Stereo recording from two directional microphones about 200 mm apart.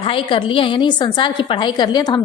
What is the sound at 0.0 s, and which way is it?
A woman's voice, 25° left (ahead or behind).